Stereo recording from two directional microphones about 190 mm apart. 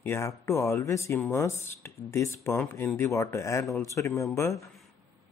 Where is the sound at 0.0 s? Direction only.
15° left (ahead or behind).